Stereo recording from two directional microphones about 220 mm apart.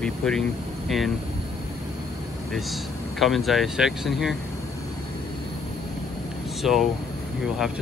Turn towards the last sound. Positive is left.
turn(degrees=0)  # may be behind; listen again after turning